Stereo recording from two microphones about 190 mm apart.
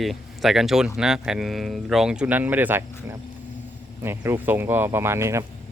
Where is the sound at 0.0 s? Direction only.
Centre (ahead or behind).